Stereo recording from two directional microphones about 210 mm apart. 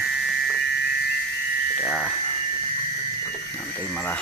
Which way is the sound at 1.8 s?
5° right (ahead or behind).